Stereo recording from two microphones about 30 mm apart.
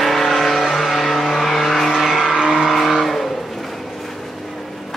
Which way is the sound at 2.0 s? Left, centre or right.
Centre.